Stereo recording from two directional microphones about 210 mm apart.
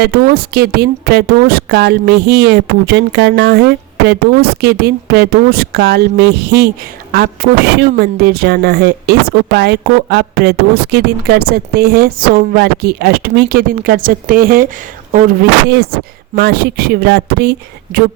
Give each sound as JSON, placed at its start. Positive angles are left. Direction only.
{"t": 0.0, "sound": "a woman's voice", "side_deg": -45}